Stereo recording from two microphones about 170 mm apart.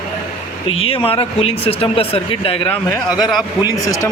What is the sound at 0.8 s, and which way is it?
Speech, 35° left (ahead or behind).